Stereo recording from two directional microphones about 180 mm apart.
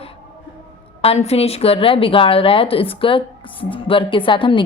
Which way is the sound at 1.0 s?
35° left (ahead or behind).